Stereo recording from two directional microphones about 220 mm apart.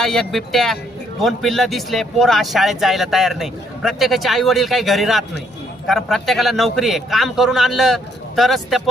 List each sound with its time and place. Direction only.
0.0 s speech: centre (ahead or behind)